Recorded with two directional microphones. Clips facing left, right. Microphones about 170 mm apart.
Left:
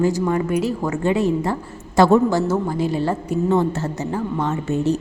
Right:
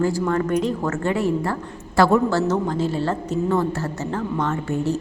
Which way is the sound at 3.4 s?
20° left (ahead or behind).